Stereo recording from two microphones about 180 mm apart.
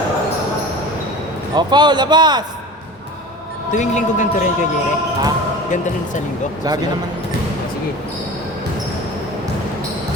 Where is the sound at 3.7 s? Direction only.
40° left (ahead or behind).